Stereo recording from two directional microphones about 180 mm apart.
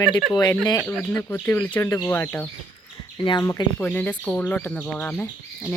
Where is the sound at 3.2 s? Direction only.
25° left (ahead or behind).